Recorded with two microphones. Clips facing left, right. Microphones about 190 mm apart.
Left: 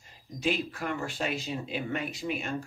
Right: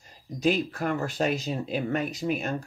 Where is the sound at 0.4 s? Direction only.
40° right (ahead or behind).